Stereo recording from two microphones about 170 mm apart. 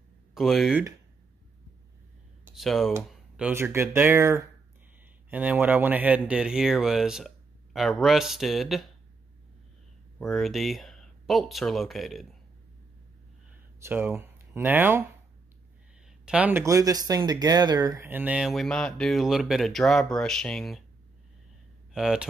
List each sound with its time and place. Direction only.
0.3 s speech: centre (ahead or behind)
2.5 s speech: centre (ahead or behind)
10.1 s speech: centre (ahead or behind)
13.8 s speech: 15° right (ahead or behind)
16.3 s speech: 10° right (ahead or behind)
21.9 s speech: 5° right (ahead or behind)